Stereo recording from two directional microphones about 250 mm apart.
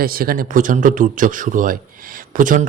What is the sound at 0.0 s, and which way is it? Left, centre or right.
A man's voice, right.